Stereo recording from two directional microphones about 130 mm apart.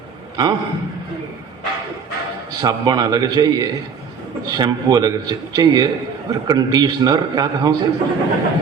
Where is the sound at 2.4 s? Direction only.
30° right (ahead or behind).